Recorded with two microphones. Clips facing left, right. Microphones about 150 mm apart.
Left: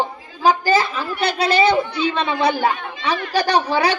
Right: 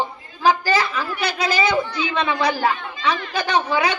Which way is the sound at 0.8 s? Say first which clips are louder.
Left 2 dB; 25° left (ahead or behind).